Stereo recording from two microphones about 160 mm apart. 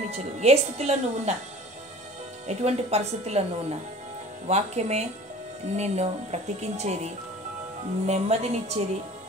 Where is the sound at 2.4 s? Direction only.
40° right (ahead or behind).